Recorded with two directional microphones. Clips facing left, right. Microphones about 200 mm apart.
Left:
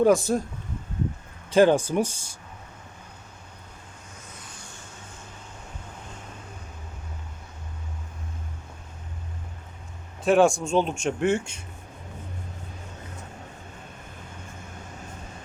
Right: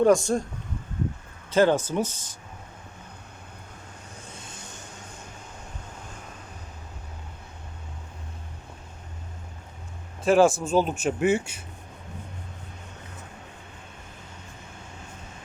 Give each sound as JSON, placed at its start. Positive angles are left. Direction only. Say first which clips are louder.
{"t": 0.0, "sound": "speech", "louder": "even", "side_deg": 0}
{"t": 1.5, "sound": "speech", "louder": "left 2 dB", "side_deg": 15}
{"t": 4.4, "sound": "vehicle", "louder": "right 2 dB", "side_deg": -25}
{"t": 10.2, "sound": "speech", "louder": "even", "side_deg": 0}